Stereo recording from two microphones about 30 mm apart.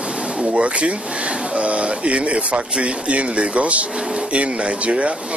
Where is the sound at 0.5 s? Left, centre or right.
Right.